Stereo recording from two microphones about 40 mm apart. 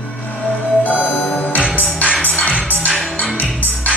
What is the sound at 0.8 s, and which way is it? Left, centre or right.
Music, left.